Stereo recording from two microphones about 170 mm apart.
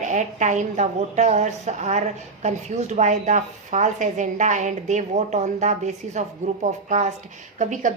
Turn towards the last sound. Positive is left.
turn(degrees=-45)  # may be behind; listen again after turning